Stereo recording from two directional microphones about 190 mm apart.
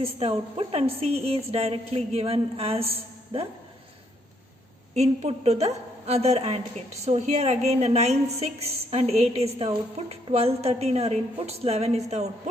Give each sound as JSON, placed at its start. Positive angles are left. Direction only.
{"t": 0.0, "sound": "a woman's voice", "side_deg": -30}
{"t": 4.9, "sound": "a woman's voice", "side_deg": -35}